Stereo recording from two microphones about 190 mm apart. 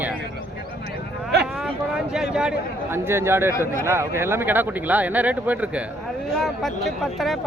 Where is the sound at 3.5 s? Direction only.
15° left (ahead or behind).